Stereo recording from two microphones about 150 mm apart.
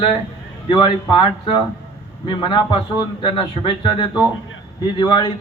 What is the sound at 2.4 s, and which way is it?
Speech, 35° left (ahead or behind).